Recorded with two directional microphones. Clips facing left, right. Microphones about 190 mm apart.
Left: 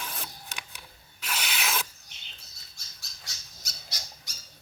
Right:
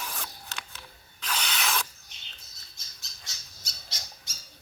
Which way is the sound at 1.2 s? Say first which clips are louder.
Right 1 dB; 10° left (ahead or behind).